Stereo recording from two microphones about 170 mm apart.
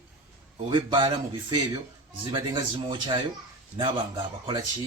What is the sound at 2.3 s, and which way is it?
Speech, 30° right (ahead or behind).